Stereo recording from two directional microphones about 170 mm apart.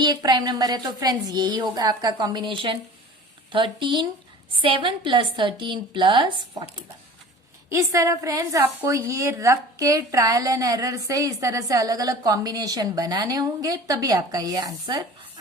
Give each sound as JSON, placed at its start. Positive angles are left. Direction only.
{"t": 0.0, "sound": "a woman's voice", "side_deg": -25}
{"t": 7.7, "sound": "a woman's voice", "side_deg": -15}